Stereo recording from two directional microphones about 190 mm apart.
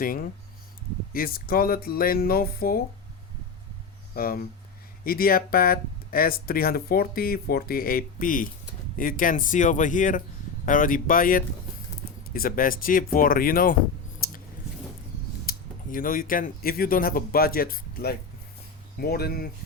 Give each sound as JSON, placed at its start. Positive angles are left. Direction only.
{"t": 0.0, "sound": "speech", "side_deg": 50}
{"t": 4.1, "sound": "speech", "side_deg": 50}
{"t": 14.2, "sound": "a sound", "side_deg": 50}
{"t": 15.4, "sound": "speech", "side_deg": 45}